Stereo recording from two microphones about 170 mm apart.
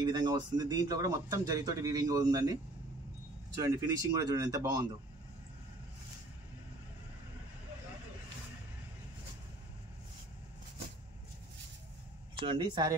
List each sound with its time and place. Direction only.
0.0 s a man's voice: 25° right (ahead or behind)
12.4 s a man's voice: 25° right (ahead or behind)